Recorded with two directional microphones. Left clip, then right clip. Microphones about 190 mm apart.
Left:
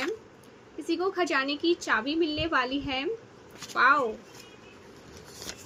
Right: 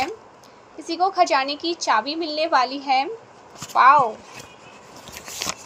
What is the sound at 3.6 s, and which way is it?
Speech, 20° right (ahead or behind).